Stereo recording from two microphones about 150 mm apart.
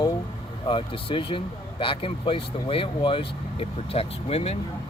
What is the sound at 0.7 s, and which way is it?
Speech, 35° left (ahead or behind).